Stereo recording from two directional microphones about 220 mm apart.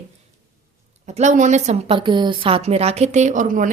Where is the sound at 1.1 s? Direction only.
30° right (ahead or behind).